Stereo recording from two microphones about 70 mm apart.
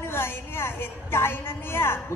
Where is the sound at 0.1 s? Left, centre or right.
Left.